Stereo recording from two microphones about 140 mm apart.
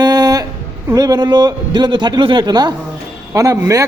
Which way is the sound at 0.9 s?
30° right (ahead or behind).